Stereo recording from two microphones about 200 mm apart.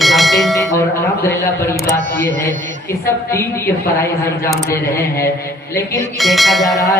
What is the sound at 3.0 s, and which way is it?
Speech, 15° left (ahead or behind).